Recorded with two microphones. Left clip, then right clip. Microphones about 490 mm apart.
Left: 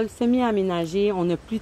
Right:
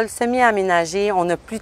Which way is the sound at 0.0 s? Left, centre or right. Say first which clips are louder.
Right 7 dB; right.